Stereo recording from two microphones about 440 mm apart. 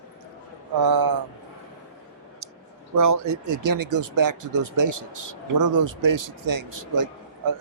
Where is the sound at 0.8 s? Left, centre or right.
Right.